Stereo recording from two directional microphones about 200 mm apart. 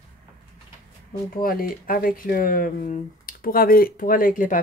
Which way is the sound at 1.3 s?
45° left (ahead or behind).